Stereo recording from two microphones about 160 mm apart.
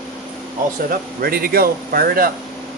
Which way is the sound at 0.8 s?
65° right (ahead or behind).